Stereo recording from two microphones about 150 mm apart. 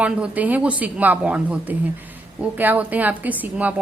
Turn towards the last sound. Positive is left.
turn(degrees=-10)  # may be behind; listen again after turning